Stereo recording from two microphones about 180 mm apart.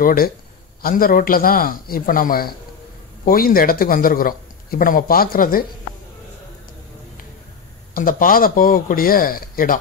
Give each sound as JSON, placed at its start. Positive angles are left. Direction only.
{"t": 0.0, "sound": "a man's voice", "side_deg": 55}
{"t": 7.9, "sound": "a man's voice", "side_deg": 50}